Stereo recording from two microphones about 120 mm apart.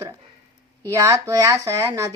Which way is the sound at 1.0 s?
25° right (ahead or behind).